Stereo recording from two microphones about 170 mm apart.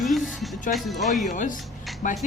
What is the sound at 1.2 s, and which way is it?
Speech, 45° left (ahead or behind).